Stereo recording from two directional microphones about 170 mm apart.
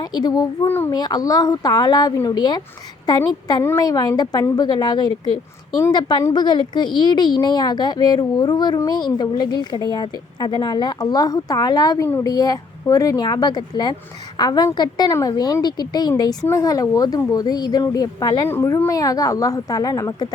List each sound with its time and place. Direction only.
0.0 s a woman's voice: 25° left (ahead or behind)